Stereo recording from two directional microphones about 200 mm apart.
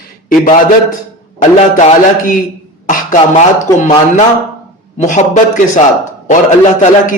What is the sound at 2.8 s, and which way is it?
A man's voice, 40° left (ahead or behind).